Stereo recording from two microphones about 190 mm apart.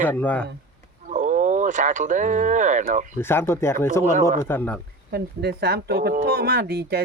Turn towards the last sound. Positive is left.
turn(degrees=-55)  # may be behind; listen again after turning